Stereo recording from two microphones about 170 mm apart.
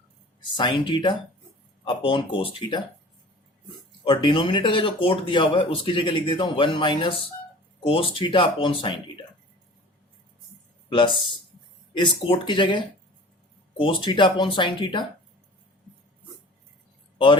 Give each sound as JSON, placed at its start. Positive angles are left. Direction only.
{"t": 0.5, "sound": "speech", "side_deg": 30}
{"t": 4.0, "sound": "speech", "side_deg": 30}
{"t": 10.8, "sound": "speech", "side_deg": 30}